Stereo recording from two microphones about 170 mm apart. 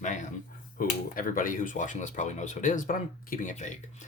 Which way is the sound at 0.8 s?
55° left (ahead or behind).